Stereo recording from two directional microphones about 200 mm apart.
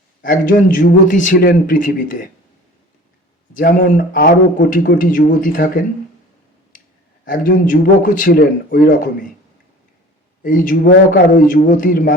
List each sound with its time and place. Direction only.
0.2 s a man's voice: 40° left (ahead or behind)
3.6 s a man's voice: 40° left (ahead or behind)
7.3 s a man's voice: 45° left (ahead or behind)
10.4 s a man's voice: 40° left (ahead or behind)